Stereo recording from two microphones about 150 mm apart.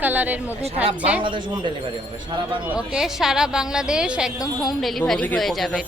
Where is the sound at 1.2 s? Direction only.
35° right (ahead or behind).